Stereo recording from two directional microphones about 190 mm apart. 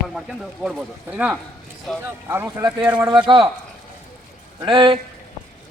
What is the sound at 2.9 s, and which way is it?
Speech, 25° right (ahead or behind).